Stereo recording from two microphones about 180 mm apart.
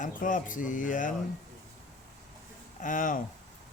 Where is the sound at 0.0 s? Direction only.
45° left (ahead or behind).